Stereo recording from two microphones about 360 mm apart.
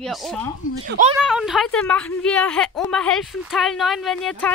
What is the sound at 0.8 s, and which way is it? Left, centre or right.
Speech, right.